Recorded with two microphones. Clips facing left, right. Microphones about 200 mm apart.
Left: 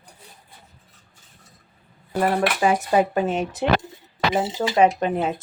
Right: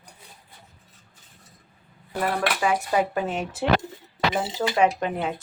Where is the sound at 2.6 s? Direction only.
25° left (ahead or behind).